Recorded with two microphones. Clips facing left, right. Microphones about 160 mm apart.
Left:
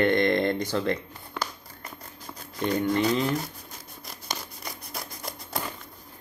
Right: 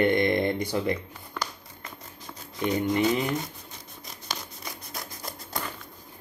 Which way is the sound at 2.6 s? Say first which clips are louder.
Even; 20° right (ahead or behind).